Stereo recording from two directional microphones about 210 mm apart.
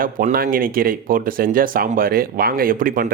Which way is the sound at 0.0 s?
40° right (ahead or behind).